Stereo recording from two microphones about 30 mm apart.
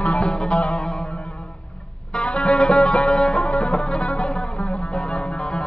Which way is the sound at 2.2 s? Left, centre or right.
Left.